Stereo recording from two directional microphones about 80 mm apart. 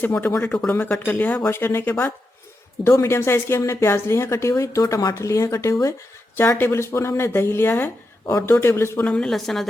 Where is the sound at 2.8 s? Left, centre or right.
Left.